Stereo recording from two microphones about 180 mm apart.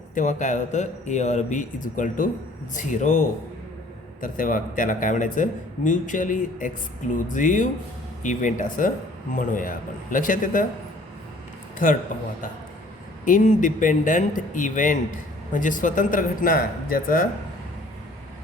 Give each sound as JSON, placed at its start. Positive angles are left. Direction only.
{"t": 0.1, "sound": "a man's voice", "side_deg": 45}
{"t": 13.2, "sound": "a man's voice", "side_deg": 45}